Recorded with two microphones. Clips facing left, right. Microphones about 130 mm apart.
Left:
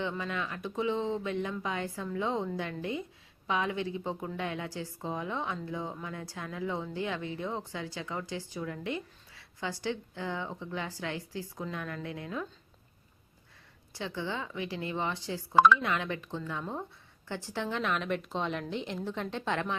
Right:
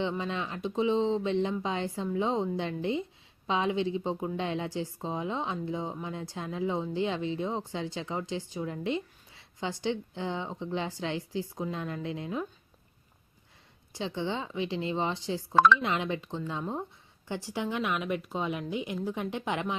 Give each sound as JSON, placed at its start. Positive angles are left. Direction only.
{"t": 0.0, "sound": "a woman's voice", "side_deg": -20}
{"t": 13.9, "sound": "a woman's voice", "side_deg": -20}
{"t": 15.5, "sound": "speech", "side_deg": 10}
{"t": 15.8, "sound": "a woman's voice", "side_deg": -20}